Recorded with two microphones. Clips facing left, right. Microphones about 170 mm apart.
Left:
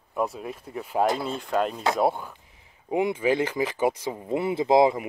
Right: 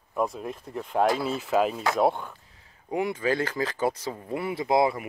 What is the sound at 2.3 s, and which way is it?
Speech, 15° left (ahead or behind).